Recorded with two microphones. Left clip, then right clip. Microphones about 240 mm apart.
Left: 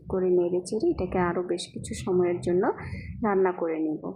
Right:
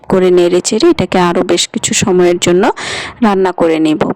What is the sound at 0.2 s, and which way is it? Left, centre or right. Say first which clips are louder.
Speech: right 15 dB; right.